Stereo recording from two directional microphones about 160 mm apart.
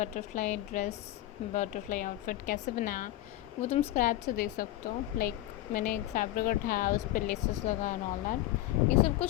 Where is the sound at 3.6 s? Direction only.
40° left (ahead or behind).